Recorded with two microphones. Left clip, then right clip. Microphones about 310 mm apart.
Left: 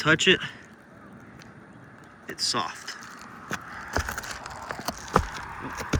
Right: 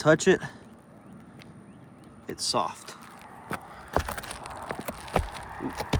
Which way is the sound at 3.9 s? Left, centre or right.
Right.